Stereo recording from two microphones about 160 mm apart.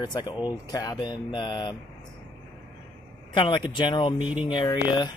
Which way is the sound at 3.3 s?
30° left (ahead or behind).